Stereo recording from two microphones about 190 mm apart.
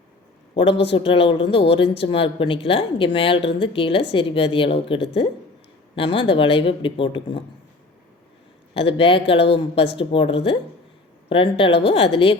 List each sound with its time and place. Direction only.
0.5 s a man's voice: 30° left (ahead or behind)
8.7 s speech: 30° left (ahead or behind)